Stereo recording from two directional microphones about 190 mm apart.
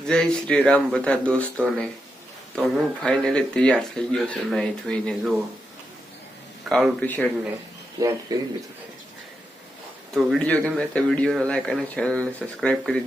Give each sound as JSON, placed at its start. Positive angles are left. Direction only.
{"t": 0.1, "sound": "speech", "side_deg": 5}
{"t": 6.7, "sound": "speech", "side_deg": 0}
{"t": 8.3, "sound": "speech", "side_deg": -20}
{"t": 10.2, "sound": "speech", "side_deg": -5}